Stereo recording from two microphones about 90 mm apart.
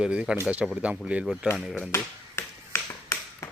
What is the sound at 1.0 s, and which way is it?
Speech, 10° right (ahead or behind).